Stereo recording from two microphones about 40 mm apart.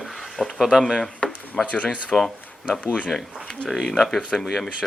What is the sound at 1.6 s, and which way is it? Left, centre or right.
Speech, left.